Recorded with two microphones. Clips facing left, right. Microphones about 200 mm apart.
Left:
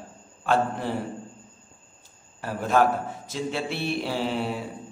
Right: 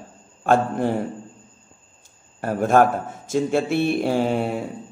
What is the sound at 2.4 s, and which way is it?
A man's voice, 50° right (ahead or behind).